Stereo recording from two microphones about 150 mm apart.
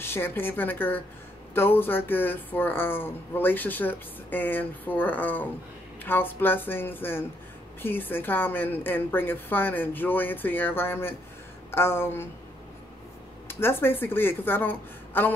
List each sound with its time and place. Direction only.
0.0 s speech: 15° left (ahead or behind)
13.5 s speech: 15° left (ahead or behind)